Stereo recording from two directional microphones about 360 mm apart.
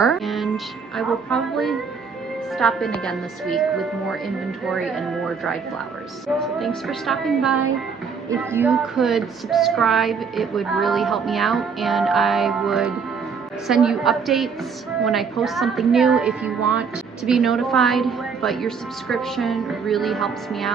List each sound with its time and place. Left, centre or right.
0.0 s a woman's voice: centre